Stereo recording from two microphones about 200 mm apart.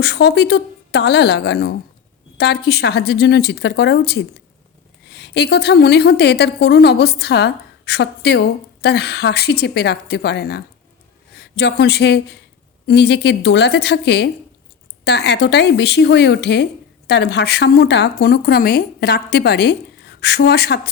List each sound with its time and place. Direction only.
0.0 s a woman's voice: 55° left (ahead or behind)